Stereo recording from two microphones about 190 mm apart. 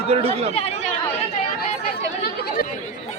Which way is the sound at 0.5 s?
35° left (ahead or behind).